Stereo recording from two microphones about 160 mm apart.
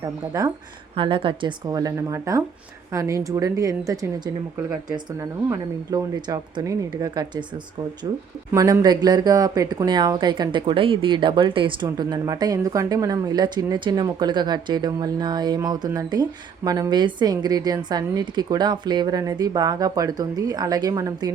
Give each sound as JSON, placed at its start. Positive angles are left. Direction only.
{"t": 0.0, "sound": "speech", "side_deg": -25}
{"t": 5.2, "sound": "speech", "side_deg": -20}
{"t": 8.5, "sound": "speech", "side_deg": -25}